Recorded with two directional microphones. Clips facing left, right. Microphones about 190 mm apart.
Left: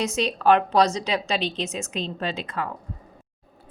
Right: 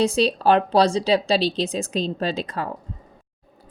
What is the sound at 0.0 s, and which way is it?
A woman's voice, 30° right (ahead or behind).